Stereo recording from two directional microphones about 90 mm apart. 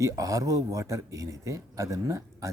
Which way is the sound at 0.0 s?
40° right (ahead or behind).